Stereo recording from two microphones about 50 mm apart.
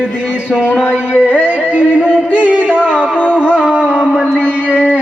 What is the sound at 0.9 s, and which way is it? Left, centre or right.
Speech, right.